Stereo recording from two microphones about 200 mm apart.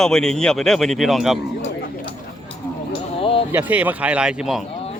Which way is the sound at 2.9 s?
25° left (ahead or behind).